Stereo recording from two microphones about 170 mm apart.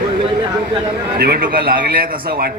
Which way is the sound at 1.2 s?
60° right (ahead or behind).